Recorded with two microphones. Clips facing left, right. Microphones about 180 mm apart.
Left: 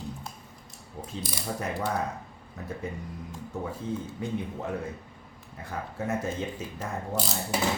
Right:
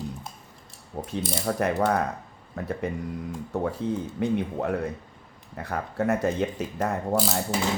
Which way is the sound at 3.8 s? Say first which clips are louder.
Right 6 dB; 70° right (ahead or behind).